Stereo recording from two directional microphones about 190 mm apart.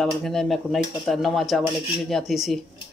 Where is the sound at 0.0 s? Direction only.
Centre (ahead or behind).